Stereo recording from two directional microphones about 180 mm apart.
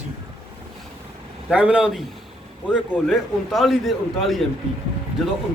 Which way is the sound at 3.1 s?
Centre (ahead or behind).